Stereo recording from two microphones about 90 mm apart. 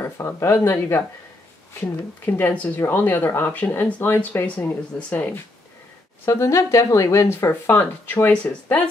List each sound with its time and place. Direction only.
0.0 s speech: 30° left (ahead or behind)
6.2 s speech: 35° left (ahead or behind); by 8.8 s 20° left (ahead or behind)